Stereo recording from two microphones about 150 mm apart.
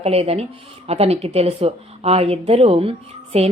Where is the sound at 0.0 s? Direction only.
40° right (ahead or behind).